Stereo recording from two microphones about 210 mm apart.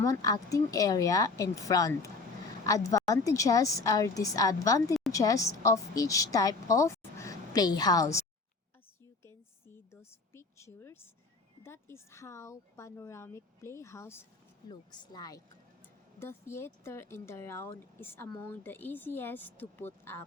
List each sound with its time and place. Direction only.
0.0 s a woman's voice: 15° left (ahead or behind)
9.7 s a sound: 10° left (ahead or behind)
11.6 s speech: 10° left (ahead or behind)